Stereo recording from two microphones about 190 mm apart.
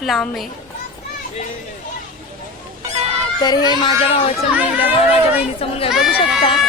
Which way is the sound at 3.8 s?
30° left (ahead or behind).